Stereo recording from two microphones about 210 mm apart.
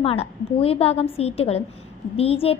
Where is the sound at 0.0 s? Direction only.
30° left (ahead or behind).